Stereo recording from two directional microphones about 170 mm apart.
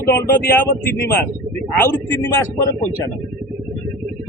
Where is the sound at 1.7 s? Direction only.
15° left (ahead or behind).